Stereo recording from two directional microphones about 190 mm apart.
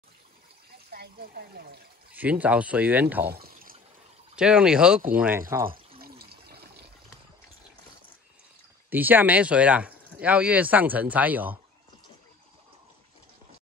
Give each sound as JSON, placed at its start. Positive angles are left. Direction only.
{"t": 0.8, "sound": "a sound", "side_deg": -55}
{"t": 2.1, "sound": "speech", "side_deg": -10}
{"t": 3.3, "sound": "pour", "side_deg": -55}
{"t": 4.4, "sound": "speech", "side_deg": -5}
{"t": 5.5, "sound": "speech", "side_deg": -15}
{"t": 5.9, "sound": "trickle", "side_deg": -55}
{"t": 8.9, "sound": "speech", "side_deg": -10}